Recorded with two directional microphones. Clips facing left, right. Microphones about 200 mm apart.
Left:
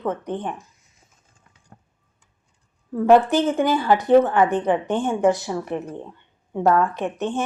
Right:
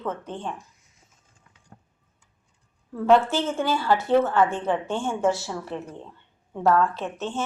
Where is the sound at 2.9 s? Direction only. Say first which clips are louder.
Left 4 dB; 15° left (ahead or behind).